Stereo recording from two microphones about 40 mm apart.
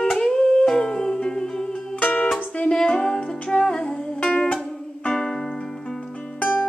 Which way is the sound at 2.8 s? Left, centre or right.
Centre.